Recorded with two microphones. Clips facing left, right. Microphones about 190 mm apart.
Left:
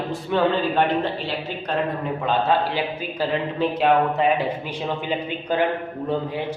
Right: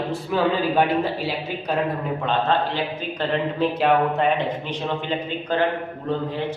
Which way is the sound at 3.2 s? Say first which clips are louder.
Even; centre (ahead or behind).